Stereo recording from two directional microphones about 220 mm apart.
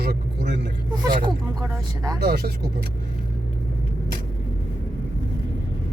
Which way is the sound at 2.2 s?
45° right (ahead or behind).